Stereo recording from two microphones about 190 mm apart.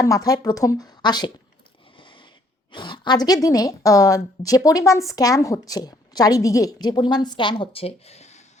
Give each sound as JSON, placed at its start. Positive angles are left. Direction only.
{"t": 0.0, "sound": "a woman's voice", "side_deg": 20}
{"t": 2.7, "sound": "a woman's voice", "side_deg": 25}